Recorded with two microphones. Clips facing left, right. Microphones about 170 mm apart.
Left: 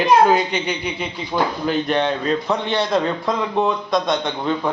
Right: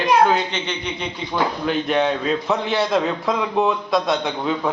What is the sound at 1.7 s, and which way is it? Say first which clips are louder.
A man's voice: right 1 dB; centre (ahead or behind).